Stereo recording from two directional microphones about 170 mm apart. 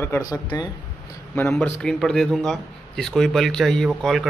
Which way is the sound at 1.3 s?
15° left (ahead or behind).